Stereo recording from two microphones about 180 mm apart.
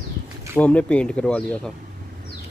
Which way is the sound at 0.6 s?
5° left (ahead or behind).